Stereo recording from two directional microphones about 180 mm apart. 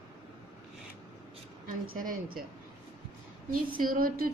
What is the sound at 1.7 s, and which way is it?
Speech, 50° right (ahead or behind).